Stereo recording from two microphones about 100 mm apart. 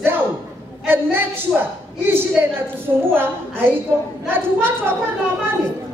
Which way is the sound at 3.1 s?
20° right (ahead or behind).